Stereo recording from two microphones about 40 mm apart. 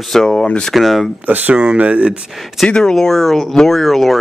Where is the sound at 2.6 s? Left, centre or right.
Centre.